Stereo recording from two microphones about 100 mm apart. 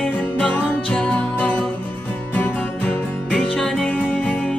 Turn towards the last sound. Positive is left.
turn(degrees=10)  # may be behind; listen again after turning